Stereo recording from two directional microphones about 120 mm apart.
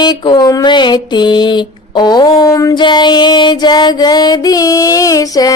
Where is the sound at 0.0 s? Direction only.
40° left (ahead or behind).